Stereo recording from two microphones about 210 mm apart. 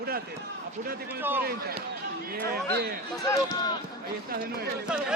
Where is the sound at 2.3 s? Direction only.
45° right (ahead or behind).